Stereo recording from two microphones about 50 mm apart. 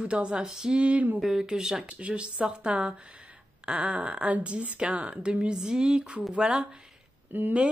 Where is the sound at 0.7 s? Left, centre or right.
Right.